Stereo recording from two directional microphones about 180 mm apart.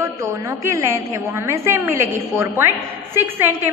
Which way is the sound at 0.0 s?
15° right (ahead or behind).